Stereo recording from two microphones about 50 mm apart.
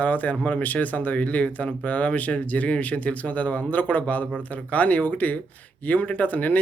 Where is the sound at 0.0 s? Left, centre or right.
Left.